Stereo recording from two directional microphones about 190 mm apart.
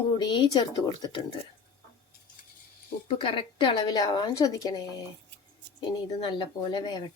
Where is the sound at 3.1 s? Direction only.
25° left (ahead or behind).